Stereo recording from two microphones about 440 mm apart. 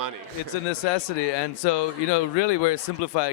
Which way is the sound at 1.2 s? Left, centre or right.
Left.